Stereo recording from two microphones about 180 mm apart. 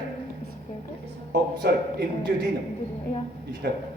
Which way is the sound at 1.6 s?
65° right (ahead or behind).